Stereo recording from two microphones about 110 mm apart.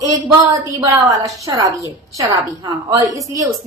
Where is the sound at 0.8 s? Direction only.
30° right (ahead or behind).